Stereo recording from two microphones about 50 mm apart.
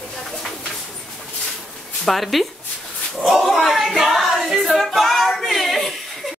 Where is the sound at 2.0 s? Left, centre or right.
Centre.